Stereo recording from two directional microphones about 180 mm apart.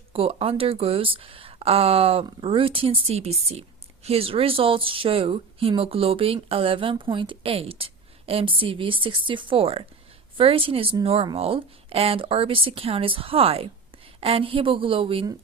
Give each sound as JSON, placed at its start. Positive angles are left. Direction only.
{"t": 0.1, "sound": "a woman's voice", "side_deg": -35}